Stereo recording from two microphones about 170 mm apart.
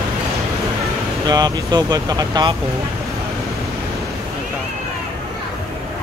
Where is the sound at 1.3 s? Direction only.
25° right (ahead or behind).